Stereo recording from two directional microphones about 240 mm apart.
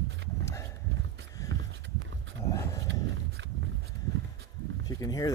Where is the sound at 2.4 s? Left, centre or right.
Centre.